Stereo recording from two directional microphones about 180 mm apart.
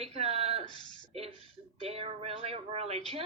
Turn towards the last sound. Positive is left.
turn(degrees=-35)  # may be behind; listen again after turning